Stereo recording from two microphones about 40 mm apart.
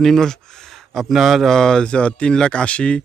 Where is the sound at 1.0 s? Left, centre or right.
Centre.